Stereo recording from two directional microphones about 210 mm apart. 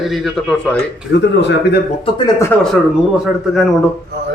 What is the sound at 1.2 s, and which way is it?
Speech, 55° left (ahead or behind).